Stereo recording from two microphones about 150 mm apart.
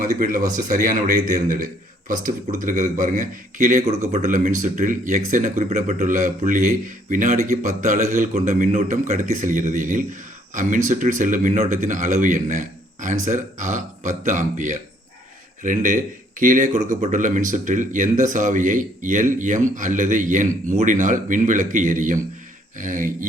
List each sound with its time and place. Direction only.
0.0 s speech: 60° right (ahead or behind)